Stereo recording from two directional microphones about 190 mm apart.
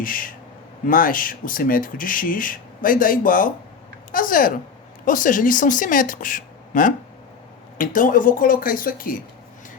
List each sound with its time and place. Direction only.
0.0 s speech: 45° left (ahead or behind)